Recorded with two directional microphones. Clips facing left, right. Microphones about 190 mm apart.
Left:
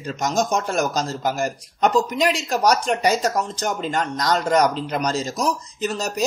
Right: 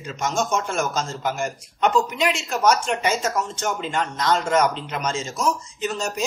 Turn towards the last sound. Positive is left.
turn(degrees=40)  # may be behind; listen again after turning